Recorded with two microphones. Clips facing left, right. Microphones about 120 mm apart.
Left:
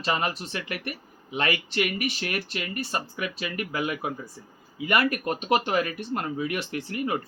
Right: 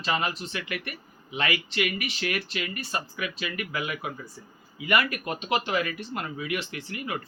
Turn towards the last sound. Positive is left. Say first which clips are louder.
# left 6 dB
turn(degrees=45)  # may be behind; listen again after turning